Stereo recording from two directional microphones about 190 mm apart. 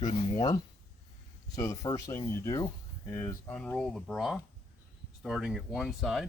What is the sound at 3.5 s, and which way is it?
Speech, 5° left (ahead or behind).